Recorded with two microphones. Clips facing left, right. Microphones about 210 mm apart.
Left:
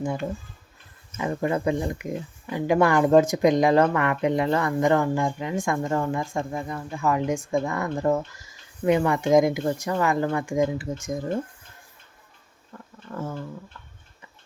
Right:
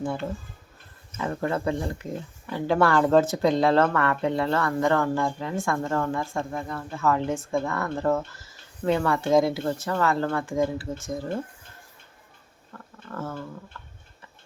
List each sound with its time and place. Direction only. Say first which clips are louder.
0.0 s speech: left 1 dB; 15° left (ahead or behind)
12.7 s speech: left 1 dB; 15° left (ahead or behind)